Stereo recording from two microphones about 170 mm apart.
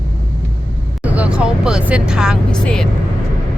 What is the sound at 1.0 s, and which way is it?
Speech, 10° right (ahead or behind).